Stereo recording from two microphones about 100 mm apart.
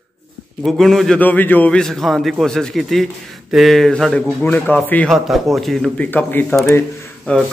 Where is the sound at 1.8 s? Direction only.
5° left (ahead or behind).